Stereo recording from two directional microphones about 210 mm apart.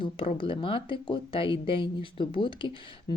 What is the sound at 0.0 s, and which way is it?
Speech, 25° left (ahead or behind).